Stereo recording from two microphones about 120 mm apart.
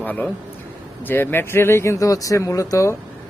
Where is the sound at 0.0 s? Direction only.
15° left (ahead or behind).